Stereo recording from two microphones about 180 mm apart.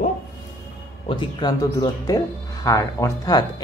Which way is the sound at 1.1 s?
25° left (ahead or behind).